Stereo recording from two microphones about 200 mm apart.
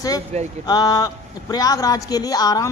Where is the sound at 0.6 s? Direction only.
20° left (ahead or behind).